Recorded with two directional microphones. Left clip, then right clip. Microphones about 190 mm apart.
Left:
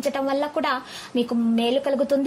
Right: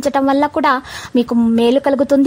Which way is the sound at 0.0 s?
45° right (ahead or behind).